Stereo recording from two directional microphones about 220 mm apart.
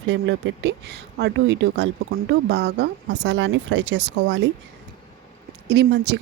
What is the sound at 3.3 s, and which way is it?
Speech, 60° right (ahead or behind).